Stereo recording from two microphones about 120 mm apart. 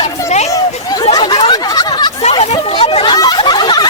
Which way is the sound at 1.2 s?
40° left (ahead or behind).